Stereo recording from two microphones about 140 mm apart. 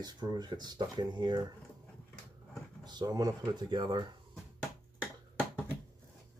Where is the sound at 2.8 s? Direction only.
30° right (ahead or behind).